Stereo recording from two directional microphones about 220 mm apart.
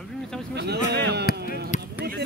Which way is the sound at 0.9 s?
50° right (ahead or behind).